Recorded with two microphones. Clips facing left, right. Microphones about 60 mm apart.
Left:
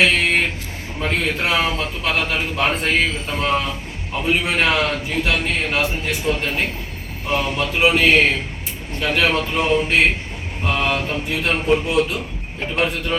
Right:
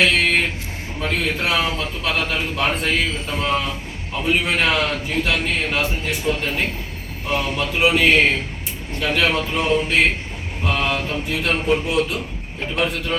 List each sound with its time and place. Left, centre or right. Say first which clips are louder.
0.0 s vehicle: left 1 dB; centre
0.9 s a man's voice: left 1 dB; centre